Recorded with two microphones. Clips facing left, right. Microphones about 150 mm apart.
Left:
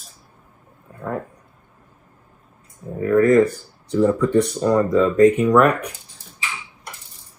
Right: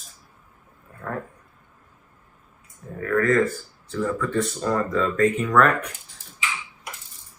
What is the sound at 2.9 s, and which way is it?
Speech, 20° left (ahead or behind).